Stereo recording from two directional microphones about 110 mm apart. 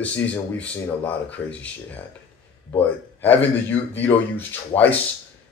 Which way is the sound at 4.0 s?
15° left (ahead or behind).